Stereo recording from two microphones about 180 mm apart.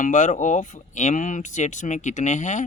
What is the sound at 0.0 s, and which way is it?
A man's voice, 45° left (ahead or behind).